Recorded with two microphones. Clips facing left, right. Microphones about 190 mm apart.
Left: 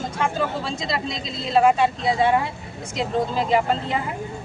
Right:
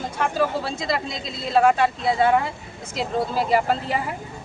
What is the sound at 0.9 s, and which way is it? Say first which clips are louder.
A man's voice: right 1 dB; centre (ahead or behind).